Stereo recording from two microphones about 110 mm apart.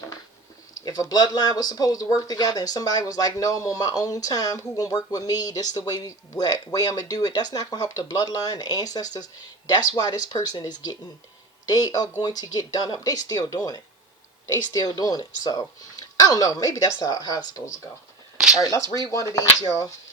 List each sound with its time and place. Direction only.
0.9 s speech: 35° left (ahead or behind)
18.3 s a sound: 5° right (ahead or behind)
18.6 s speech: 30° left (ahead or behind)